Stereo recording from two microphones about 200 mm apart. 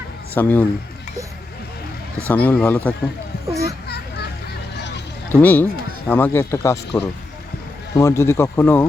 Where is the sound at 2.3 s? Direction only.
10° left (ahead or behind).